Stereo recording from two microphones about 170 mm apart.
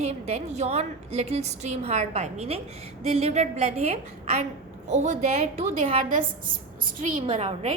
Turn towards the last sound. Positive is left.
turn(degrees=-40)  # may be behind; listen again after turning